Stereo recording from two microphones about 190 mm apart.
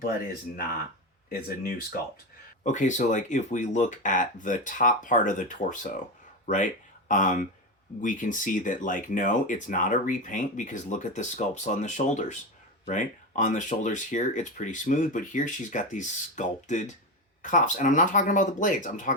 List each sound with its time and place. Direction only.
1.3 s speech: 55° left (ahead or behind)
2.6 s speech: 40° left (ahead or behind)
6.4 s a sound: 40° left (ahead or behind)
7.1 s speech: 45° left (ahead or behind)